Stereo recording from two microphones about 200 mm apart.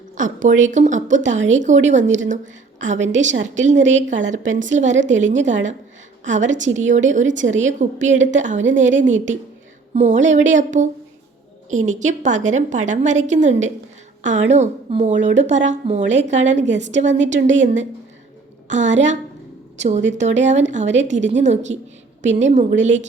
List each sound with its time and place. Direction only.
0.2 s a woman's voice: 40° right (ahead or behind)